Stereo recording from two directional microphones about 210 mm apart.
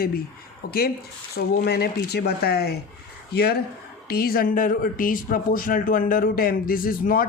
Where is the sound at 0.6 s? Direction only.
45° left (ahead or behind).